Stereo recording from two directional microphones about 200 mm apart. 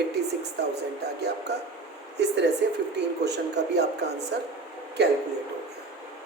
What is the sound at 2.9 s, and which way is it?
A man's voice, 55° right (ahead or behind).